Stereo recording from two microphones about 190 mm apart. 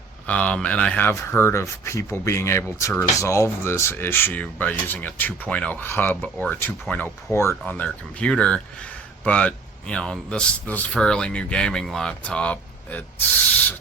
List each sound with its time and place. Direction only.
0.3 s speech: 5° left (ahead or behind)